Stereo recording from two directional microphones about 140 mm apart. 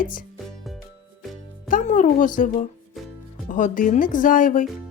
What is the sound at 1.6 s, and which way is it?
Speech, 65° left (ahead or behind).